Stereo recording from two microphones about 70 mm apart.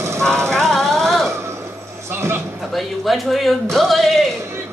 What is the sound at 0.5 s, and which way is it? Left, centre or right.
Music, centre.